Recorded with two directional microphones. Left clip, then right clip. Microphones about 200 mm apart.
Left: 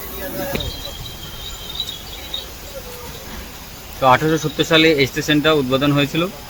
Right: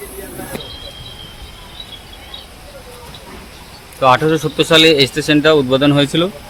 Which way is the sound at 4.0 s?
15° right (ahead or behind).